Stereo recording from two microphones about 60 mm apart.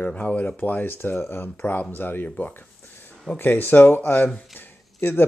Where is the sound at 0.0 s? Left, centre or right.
Left.